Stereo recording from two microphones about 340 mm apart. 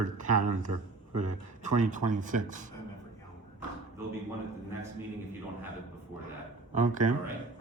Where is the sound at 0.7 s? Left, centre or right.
Right.